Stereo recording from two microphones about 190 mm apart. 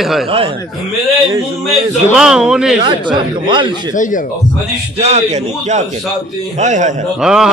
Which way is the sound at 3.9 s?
45° left (ahead or behind).